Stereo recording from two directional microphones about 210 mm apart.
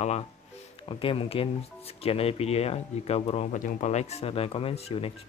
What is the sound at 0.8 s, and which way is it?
Speech, 25° left (ahead or behind).